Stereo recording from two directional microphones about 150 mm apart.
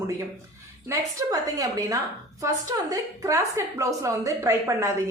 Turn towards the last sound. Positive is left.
turn(degrees=-20)  # may be behind; listen again after turning